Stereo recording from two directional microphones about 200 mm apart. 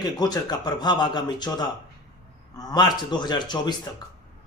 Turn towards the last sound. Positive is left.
turn(degrees=20)  # may be behind; listen again after turning